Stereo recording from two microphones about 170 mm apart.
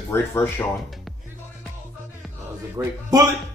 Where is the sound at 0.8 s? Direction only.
Centre (ahead or behind).